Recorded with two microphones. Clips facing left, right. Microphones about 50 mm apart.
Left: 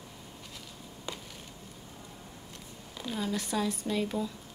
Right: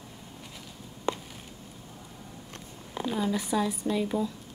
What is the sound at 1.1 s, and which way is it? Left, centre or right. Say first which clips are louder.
Chop: right 11 dB; right.